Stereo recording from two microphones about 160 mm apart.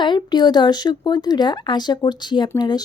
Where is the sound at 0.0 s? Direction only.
30° left (ahead or behind).